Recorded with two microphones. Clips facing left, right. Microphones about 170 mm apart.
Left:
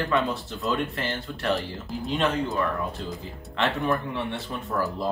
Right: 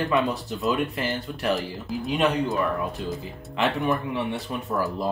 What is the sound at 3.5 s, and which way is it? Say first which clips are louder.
Speech: right 1 dB; centre (ahead or behind).